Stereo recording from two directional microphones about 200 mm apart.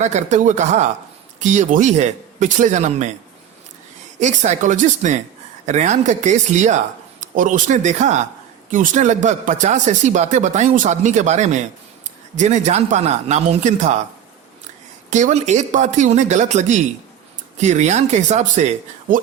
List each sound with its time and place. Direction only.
0.0 s speech: 35° right (ahead or behind)
4.2 s speech: 35° right (ahead or behind)
15.1 s speech: 35° right (ahead or behind)